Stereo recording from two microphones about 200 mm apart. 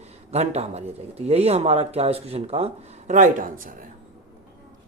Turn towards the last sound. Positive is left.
turn(degrees=-40)  # may be behind; listen again after turning